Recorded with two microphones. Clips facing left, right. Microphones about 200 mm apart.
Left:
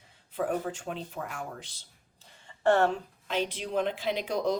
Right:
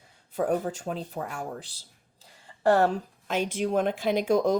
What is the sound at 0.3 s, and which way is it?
Speech, 40° right (ahead or behind).